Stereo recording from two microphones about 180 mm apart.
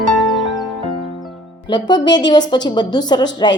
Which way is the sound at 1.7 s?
25° left (ahead or behind).